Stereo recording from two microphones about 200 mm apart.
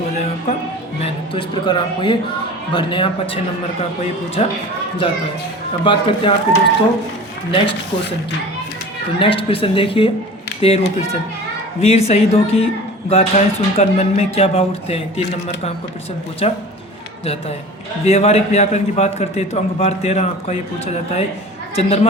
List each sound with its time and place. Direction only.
1.0 s a man's voice: 25° left (ahead or behind)
9.1 s a man's voice: 25° left (ahead or behind)
16.4 s a man's voice: 30° left (ahead or behind)
18.0 s a man's voice: 30° left (ahead or behind)